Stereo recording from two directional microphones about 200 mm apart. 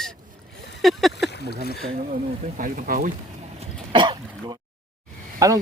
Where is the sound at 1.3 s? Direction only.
55° left (ahead or behind).